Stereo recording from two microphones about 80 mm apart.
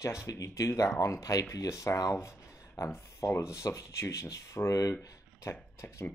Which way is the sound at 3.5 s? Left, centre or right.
Left.